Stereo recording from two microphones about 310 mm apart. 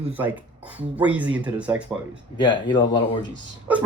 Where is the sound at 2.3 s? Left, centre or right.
Centre.